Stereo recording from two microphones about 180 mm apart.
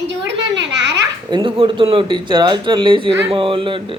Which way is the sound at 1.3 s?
25° right (ahead or behind).